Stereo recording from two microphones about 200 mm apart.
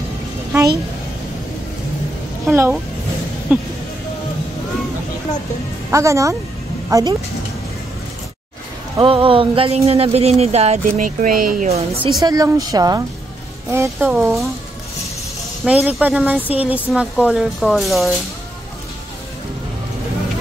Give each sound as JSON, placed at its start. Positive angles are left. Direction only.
{"t": 2.5, "sound": "a woman's voice", "side_deg": -10}
{"t": 5.9, "sound": "speech", "side_deg": -15}
{"t": 8.9, "sound": "speech", "side_deg": -25}
{"t": 12.2, "sound": "a woman's voice", "side_deg": -20}
{"t": 15.6, "sound": "a woman's voice", "side_deg": -5}